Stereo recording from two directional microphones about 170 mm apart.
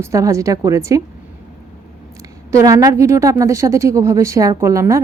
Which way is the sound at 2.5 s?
20° right (ahead or behind).